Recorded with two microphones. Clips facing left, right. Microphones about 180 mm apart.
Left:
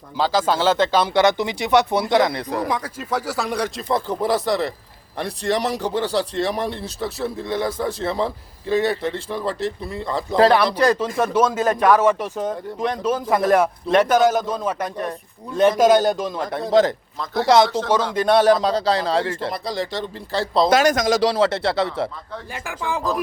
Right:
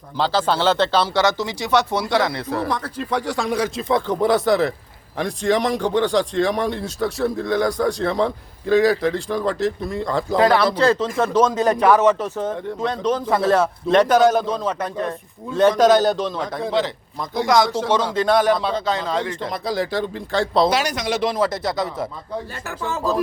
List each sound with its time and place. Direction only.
0.2 s speech: 10° left (ahead or behind)
10.8 s speech: 10° left (ahead or behind)
11.6 s speech: 10° right (ahead or behind)
12.0 s speech: 10° left (ahead or behind)
16.7 s speech: 40° left (ahead or behind)
17.4 s speech: 30° left (ahead or behind)
17.7 s speech: 10° right (ahead or behind)
18.1 s speech: 15° left (ahead or behind)
18.6 s speech: 35° left (ahead or behind)
19.5 s speech: centre (ahead or behind)
20.7 s speech: 50° left (ahead or behind); by 21.8 s 30° left (ahead or behind)
22.5 s speech: 15° left (ahead or behind)